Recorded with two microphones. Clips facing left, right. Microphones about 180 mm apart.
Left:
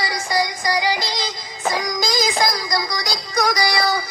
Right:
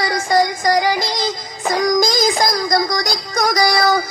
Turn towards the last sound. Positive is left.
turn(degrees=-50)  # may be behind; listen again after turning